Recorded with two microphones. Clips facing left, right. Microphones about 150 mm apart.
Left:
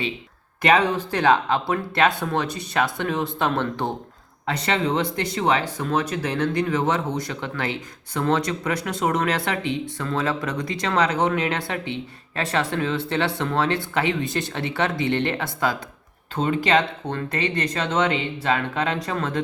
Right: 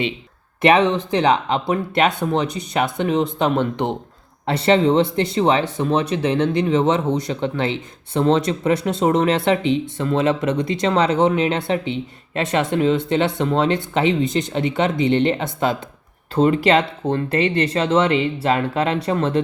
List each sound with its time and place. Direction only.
0.6 s speech: 25° right (ahead or behind)
16.6 s speech: 25° right (ahead or behind)